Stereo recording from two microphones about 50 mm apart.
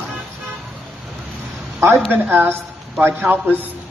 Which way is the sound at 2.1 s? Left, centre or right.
Right.